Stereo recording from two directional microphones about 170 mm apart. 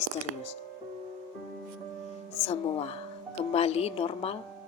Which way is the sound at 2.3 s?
35° left (ahead or behind).